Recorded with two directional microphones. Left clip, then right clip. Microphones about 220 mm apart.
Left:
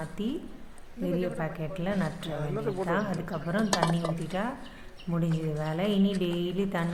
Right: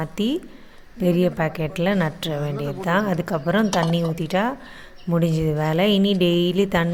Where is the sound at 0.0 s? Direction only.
40° right (ahead or behind).